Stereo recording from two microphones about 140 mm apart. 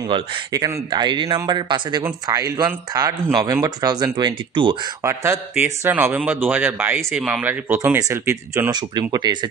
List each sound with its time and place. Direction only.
0.1 s speech: 25° right (ahead or behind)
5.0 s speech: 20° right (ahead or behind)
7.0 s speech: centre (ahead or behind)
7.2 s speech: 10° right (ahead or behind)
9.1 s speech: 30° right (ahead or behind)